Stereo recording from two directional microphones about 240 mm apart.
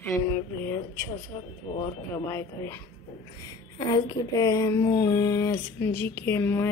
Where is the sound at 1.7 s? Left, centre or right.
Left.